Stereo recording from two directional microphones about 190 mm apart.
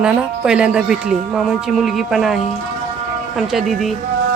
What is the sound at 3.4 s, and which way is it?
Speech, centre (ahead or behind).